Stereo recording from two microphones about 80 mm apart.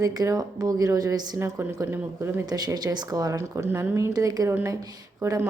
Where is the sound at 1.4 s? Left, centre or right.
Right.